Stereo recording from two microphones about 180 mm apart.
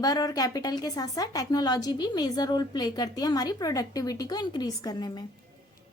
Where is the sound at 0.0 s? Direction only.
20° left (ahead or behind).